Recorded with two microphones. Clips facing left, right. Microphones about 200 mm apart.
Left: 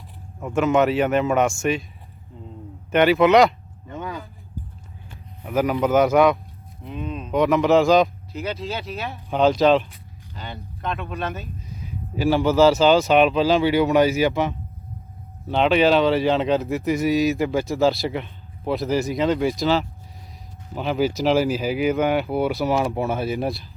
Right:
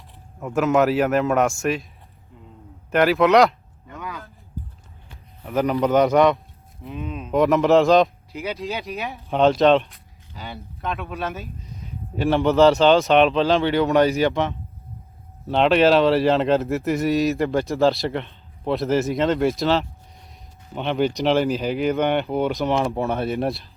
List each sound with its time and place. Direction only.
0.3 s speech: centre (ahead or behind)
2.9 s speech: centre (ahead or behind)
3.8 s vehicle: 30° left (ahead or behind)
5.5 s speech: centre (ahead or behind)
8.3 s speech: 10° right (ahead or behind)
9.3 s speech: centre (ahead or behind)